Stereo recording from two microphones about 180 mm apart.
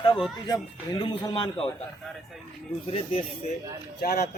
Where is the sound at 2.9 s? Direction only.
30° left (ahead or behind).